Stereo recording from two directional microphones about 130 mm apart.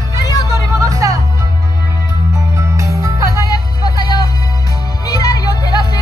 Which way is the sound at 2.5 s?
25° right (ahead or behind).